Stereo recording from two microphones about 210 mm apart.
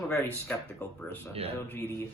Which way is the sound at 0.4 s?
10° left (ahead or behind).